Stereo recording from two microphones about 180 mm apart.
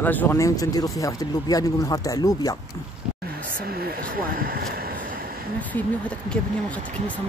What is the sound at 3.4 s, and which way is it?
Speech, 60° right (ahead or behind).